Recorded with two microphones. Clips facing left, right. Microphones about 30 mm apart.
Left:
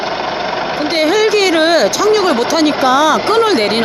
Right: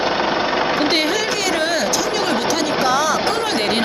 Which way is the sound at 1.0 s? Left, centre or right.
Centre.